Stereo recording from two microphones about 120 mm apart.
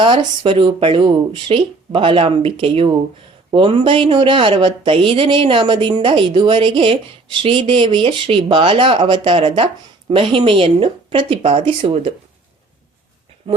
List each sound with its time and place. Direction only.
0.0 s a woman's voice: 45° right (ahead or behind)